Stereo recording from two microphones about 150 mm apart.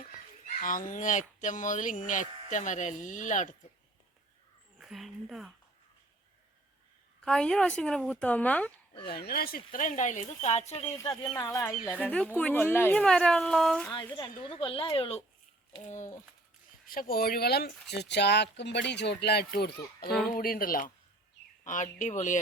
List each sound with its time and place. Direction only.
0.4 s speech: 60° left (ahead or behind)
4.8 s a woman's voice: centre (ahead or behind)
7.2 s speech: 5° left (ahead or behind)
9.0 s speech: 90° left; by 10.9 s 45° left (ahead or behind)
11.1 s speech: 20° left (ahead or behind); by 13.9 s 5° left (ahead or behind)
14.4 s speech: 35° left (ahead or behind)
15.9 s speech: 55° left (ahead or behind)
16.8 s a child's voice: 75° left (ahead or behind); by 20.1 s 90° left
20.3 s speech: 70° left (ahead or behind)
21.6 s speech: 55° left (ahead or behind)